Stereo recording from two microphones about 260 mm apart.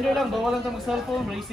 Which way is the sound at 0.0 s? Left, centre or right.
Centre.